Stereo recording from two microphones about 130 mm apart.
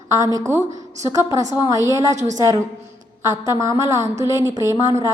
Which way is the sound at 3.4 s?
25° right (ahead or behind).